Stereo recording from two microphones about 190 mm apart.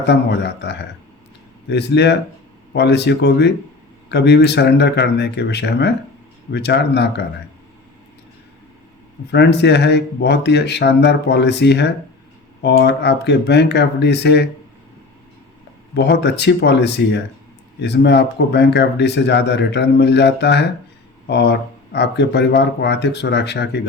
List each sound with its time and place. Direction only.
0.0 s speech: 60° left (ahead or behind)
9.3 s speech: 60° left (ahead or behind)
16.0 s speech: 60° left (ahead or behind)